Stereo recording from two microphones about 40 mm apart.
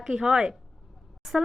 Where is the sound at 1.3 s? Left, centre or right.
Centre.